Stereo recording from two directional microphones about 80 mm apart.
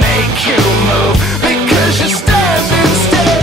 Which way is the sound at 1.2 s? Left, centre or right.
Centre.